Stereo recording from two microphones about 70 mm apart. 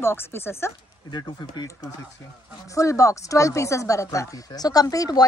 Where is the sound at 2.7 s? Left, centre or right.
Left.